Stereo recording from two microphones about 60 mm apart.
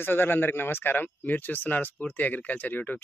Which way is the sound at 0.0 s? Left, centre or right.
Left.